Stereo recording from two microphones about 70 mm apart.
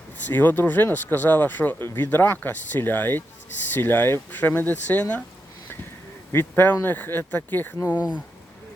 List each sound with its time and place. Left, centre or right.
0.3 s speech: left
6.3 s speech: left
7.9 s speech: centre